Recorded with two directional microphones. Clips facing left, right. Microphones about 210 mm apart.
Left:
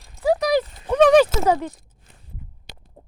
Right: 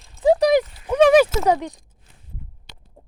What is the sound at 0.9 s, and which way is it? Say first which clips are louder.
Speech: even; 10° right (ahead or behind).